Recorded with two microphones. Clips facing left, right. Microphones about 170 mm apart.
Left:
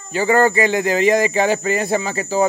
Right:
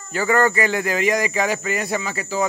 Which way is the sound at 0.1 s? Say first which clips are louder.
Left 3 dB; 25° left (ahead or behind).